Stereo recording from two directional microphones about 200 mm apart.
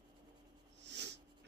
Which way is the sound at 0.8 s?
60° right (ahead or behind).